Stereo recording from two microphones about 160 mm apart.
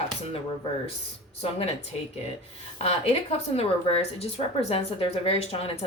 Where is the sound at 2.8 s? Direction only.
40° left (ahead or behind).